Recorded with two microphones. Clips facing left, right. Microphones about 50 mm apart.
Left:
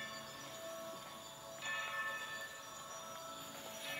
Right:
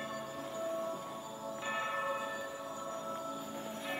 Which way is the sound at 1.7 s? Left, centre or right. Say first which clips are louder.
Right 5 dB; centre.